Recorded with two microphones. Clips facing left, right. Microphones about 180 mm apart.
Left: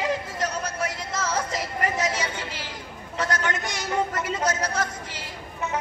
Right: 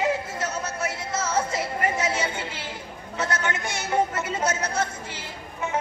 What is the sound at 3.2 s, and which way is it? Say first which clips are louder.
A woman's voice: left 1 dB; 25° right (ahead or behind).